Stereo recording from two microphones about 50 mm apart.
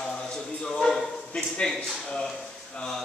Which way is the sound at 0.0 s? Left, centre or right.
Centre.